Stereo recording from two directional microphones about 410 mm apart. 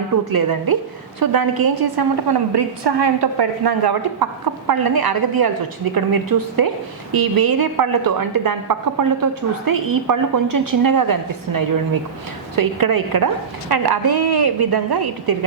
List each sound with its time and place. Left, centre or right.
0.3 s a woman's voice: right